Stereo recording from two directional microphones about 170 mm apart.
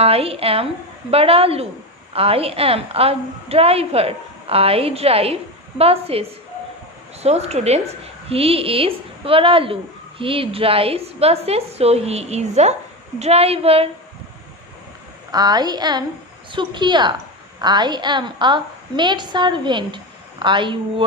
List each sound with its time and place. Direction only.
0.0 s a woman's voice: 35° right (ahead or behind)
7.2 s a woman's voice: 40° right (ahead or behind)
15.3 s a woman's voice: 20° right (ahead or behind)